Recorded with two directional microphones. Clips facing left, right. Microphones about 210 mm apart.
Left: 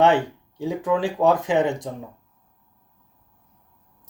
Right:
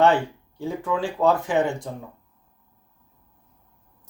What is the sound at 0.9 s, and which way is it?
Speech, 15° left (ahead or behind).